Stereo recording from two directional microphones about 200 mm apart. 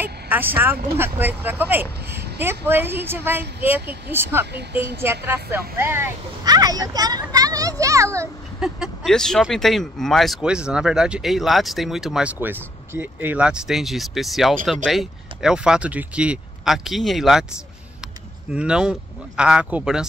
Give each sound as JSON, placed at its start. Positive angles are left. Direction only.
{"t": 0.0, "sound": "vehicle", "side_deg": -10}
{"t": 0.9, "sound": "speech", "side_deg": -10}
{"t": 8.5, "sound": "speech", "side_deg": -5}
{"t": 18.5, "sound": "speech", "side_deg": -5}